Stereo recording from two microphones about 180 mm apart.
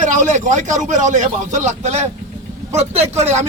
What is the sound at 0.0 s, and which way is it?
A man's voice, 45° right (ahead or behind).